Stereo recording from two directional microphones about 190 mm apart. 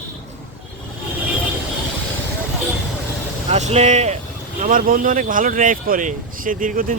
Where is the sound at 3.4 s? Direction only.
35° right (ahead or behind).